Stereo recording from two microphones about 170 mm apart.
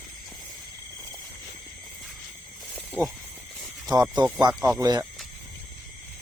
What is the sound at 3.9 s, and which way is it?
Speech, 25° right (ahead or behind).